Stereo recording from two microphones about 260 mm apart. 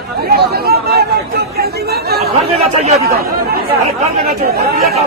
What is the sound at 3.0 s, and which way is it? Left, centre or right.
Speech, right.